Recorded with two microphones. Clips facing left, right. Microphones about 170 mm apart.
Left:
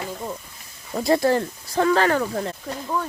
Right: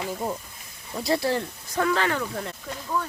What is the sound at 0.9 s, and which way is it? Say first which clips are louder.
Speech: left 5 dB; 50° left (ahead or behind).